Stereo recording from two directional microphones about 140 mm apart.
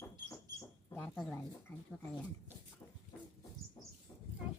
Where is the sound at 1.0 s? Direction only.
Centre (ahead or behind).